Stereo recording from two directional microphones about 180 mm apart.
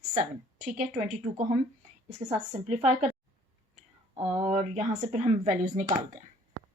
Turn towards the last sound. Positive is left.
turn(degrees=-45)  # may be behind; listen again after turning